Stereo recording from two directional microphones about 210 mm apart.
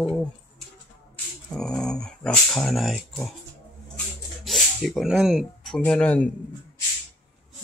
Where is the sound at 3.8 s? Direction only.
Centre (ahead or behind).